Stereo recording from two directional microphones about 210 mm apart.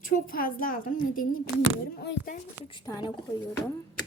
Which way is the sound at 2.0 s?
50° left (ahead or behind).